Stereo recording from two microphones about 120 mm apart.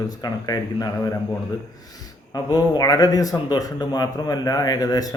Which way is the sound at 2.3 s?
35° left (ahead or behind).